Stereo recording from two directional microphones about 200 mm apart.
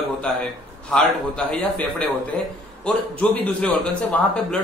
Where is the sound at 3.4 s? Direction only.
5° left (ahead or behind).